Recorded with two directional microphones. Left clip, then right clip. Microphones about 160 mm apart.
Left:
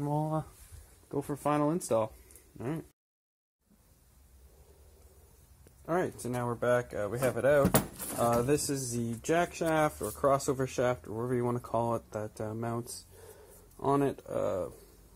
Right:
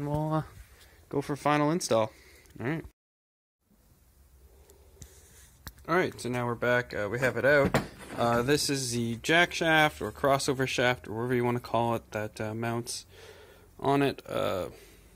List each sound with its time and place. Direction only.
0.2 s a sound: 5° right (ahead or behind)
1.0 s speech: 20° right (ahead or behind)
5.9 s speech: 15° right (ahead or behind)
8.2 s speech: 15° right (ahead or behind)
8.5 s speech: 5° right (ahead or behind)
10.5 s speech: 5° right (ahead or behind)
13.9 s speech: 5° right (ahead or behind)